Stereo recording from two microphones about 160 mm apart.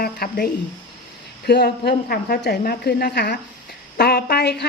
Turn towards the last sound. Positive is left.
turn(degrees=90)